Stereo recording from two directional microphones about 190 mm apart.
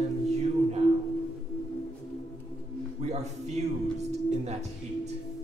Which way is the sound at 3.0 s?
35° right (ahead or behind).